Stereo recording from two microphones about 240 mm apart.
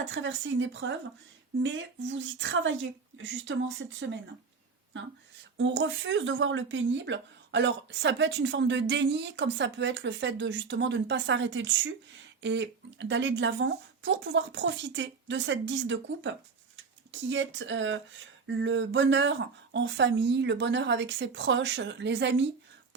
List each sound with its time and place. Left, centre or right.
0.1 s speech: right
5.5 s speech: right